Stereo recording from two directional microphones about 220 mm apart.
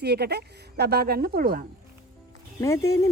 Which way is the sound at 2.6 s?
15° left (ahead or behind).